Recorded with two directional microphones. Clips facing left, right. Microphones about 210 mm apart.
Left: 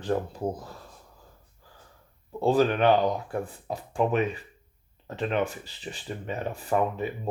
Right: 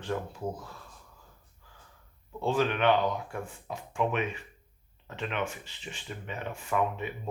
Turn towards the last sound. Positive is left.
turn(degrees=35)  # may be behind; listen again after turning